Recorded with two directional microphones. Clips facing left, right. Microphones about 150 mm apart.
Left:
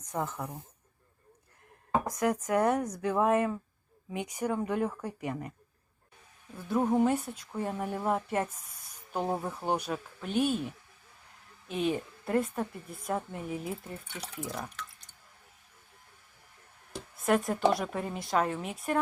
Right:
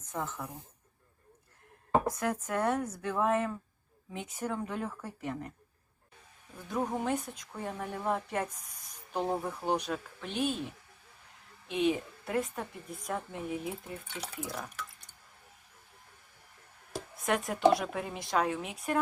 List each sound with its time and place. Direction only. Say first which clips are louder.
0.1 s speech: left 3 dB; 15° left (ahead or behind)
2.0 s speech: left 3 dB; 10° left (ahead or behind)
6.7 s a woman's voice: left 6 dB; 5° left (ahead or behind)
11.7 s a woman's voice: right 1 dB; centre (ahead or behind)
17.2 s a woman's voice: even; centre (ahead or behind)